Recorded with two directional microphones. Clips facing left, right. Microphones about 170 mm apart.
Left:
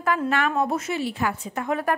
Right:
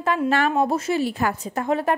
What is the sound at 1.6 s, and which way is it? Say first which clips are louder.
Speech: right 3 dB; 30° right (ahead or behind).